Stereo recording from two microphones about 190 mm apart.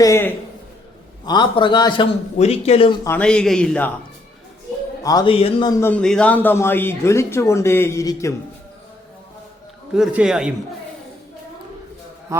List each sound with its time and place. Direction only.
0.0 s a man's voice: 15° left (ahead or behind); by 2.9 s 30° left (ahead or behind)
3.0 s a man's voice: 10° left (ahead or behind)
5.0 s a man's voice: 25° left (ahead or behind)
5.8 s speech: 5° left (ahead or behind)
9.9 s a man's voice: 5° right (ahead or behind)
12.3 s a man's voice: 15° right (ahead or behind)